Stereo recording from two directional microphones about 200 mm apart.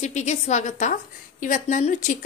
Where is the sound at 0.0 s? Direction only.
35° left (ahead or behind).